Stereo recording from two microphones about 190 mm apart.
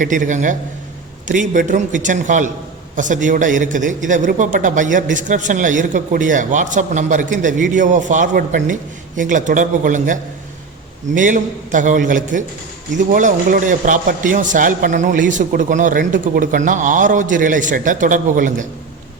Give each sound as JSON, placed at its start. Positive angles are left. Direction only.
{"t": 0.0, "sound": "a man's voice", "side_deg": -45}